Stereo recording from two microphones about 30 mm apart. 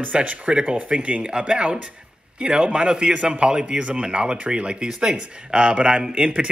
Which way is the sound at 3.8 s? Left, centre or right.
Right.